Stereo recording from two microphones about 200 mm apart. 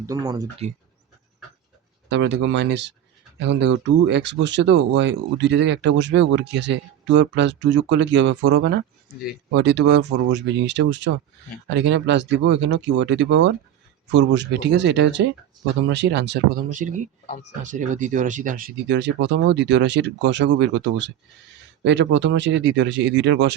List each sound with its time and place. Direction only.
0.0 s speech: 20° right (ahead or behind)
2.0 s speech: 60° right (ahead or behind)
16.7 s speech: 40° right (ahead or behind)
18.9 s speech: 60° right (ahead or behind)